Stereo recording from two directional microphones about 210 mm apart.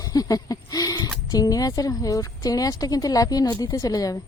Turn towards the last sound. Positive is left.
turn(degrees=15)  # may be behind; listen again after turning